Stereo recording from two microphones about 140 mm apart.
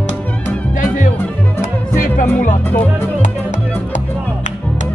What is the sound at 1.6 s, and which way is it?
Music, 75° left (ahead or behind).